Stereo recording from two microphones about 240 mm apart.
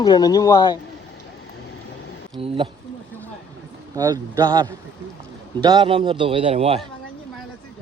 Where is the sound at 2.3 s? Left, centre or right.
Right.